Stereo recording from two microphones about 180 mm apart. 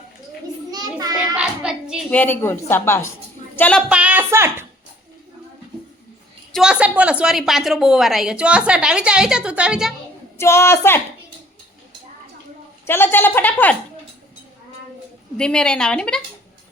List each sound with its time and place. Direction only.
0.7 s child singing: 20° right (ahead or behind)
1.4 s hands: 5° right (ahead or behind)
2.0 s a woman's voice: 10° left (ahead or behind); by 4.6 s 15° right (ahead or behind)
6.5 s a woman's voice: 5° right (ahead or behind)
10.3 s a woman's voice: 15° left (ahead or behind)
12.8 s a woman's voice: 10° left (ahead or behind)
15.4 s a woman's voice: 5° left (ahead or behind)